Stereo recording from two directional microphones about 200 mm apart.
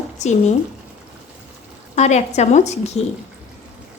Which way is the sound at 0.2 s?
35° left (ahead or behind).